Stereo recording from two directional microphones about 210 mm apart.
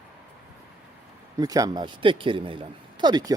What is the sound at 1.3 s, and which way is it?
A man's voice, 15° right (ahead or behind).